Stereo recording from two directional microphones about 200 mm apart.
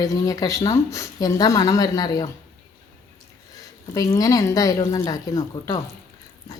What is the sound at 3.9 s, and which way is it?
Speech, 15° left (ahead or behind).